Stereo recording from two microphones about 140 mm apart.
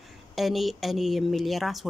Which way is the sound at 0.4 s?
Centre (ahead or behind).